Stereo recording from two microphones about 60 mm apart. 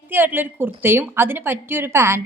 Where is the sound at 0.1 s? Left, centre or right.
Right.